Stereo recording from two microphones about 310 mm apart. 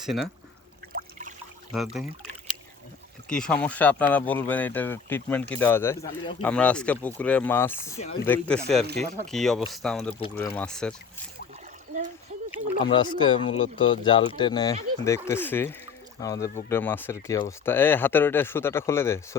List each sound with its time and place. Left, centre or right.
1.7 s speech: centre
3.2 s speech: centre
7.9 s speech: left
8.3 s speech: centre
12.8 s speech: centre